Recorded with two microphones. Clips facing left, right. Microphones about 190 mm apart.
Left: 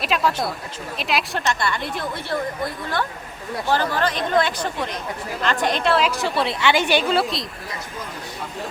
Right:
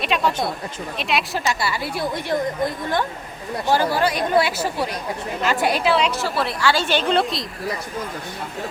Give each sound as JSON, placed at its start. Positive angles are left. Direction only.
{"t": 0.0, "sound": "a woman's voice", "side_deg": 0}
{"t": 3.7, "sound": "a woman's voice", "side_deg": -10}
{"t": 6.5, "sound": "a woman's voice", "side_deg": 20}
{"t": 7.0, "sound": "a woman's voice", "side_deg": 5}